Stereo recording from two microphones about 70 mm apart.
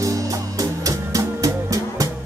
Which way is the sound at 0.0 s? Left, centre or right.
Right.